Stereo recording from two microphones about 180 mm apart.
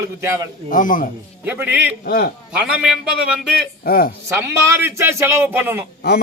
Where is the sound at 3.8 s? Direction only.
55° left (ahead or behind).